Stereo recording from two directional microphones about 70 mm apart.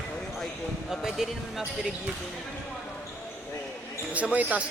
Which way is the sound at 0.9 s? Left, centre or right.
Centre.